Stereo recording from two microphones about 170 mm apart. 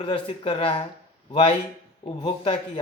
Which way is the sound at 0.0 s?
30° left (ahead or behind).